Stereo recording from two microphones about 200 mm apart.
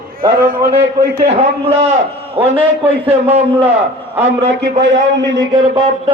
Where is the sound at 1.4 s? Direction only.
30° right (ahead or behind).